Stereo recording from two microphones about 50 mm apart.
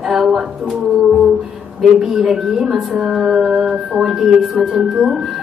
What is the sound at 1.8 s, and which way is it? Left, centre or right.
Female singing, centre.